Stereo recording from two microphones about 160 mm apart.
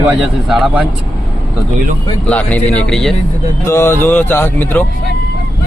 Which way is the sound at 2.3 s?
10° left (ahead or behind).